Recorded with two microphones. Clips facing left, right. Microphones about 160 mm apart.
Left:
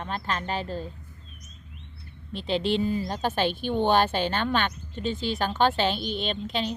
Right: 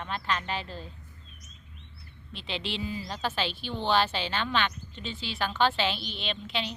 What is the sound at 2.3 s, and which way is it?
A woman's voice, 45° left (ahead or behind).